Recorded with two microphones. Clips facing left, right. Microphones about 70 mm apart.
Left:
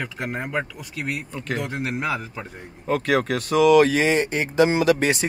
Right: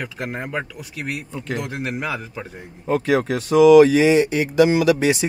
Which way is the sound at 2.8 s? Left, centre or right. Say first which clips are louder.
Right 2 dB; left.